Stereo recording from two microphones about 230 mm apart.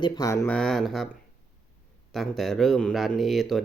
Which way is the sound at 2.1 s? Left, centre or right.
Centre.